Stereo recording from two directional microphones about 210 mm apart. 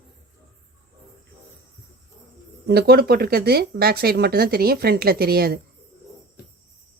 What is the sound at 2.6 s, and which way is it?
Speech, 50° right (ahead or behind).